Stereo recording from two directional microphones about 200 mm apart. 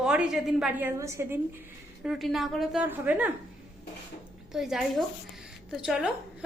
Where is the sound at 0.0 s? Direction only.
5° right (ahead or behind).